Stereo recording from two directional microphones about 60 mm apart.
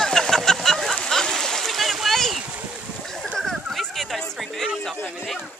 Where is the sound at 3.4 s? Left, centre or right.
Centre.